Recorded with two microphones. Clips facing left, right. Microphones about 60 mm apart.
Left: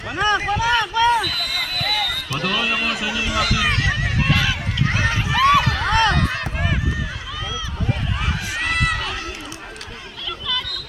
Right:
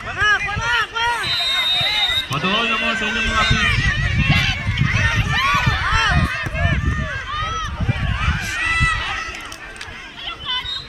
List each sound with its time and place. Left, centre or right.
0.2 s a sound: centre
1.2 s basketball bounce: right
2.4 s speech: right
2.6 s speech: centre
3.0 s speech: right
5.3 s run: centre
7.3 s run: right
8.5 s run: centre